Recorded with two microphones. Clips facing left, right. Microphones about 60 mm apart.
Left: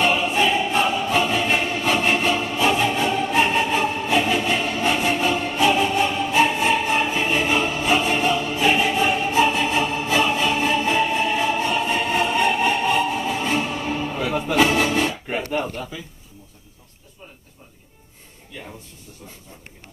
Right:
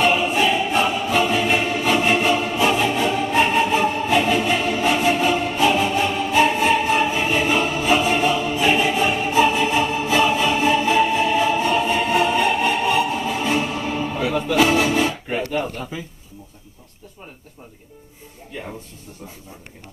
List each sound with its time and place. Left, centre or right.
0.0 s music: centre
14.3 s music: centre
15.9 s a sound: right